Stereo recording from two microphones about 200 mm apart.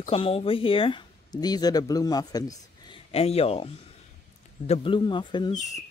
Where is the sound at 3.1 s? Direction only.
30° left (ahead or behind).